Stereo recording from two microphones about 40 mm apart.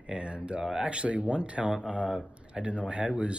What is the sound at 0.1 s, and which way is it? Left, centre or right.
Speech, right.